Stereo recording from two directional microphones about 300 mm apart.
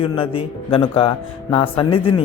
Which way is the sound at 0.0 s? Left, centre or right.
Centre.